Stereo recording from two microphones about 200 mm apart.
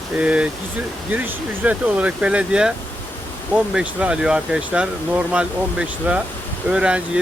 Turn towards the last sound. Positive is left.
turn(degrees=-5)  # may be behind; listen again after turning